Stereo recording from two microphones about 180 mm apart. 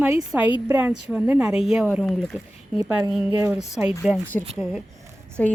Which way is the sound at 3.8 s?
5° right (ahead or behind).